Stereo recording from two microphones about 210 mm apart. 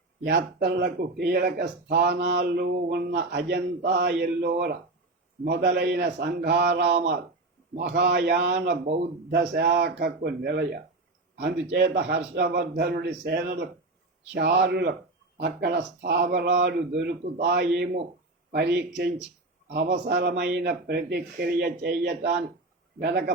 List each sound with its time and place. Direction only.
0.3 s a man's voice: 50° right (ahead or behind)